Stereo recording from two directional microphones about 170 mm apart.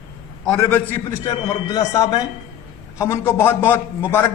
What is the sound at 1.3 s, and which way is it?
A man's voice, 20° left (ahead or behind).